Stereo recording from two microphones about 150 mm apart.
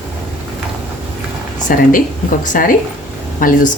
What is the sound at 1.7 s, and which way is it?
Speech, 65° left (ahead or behind).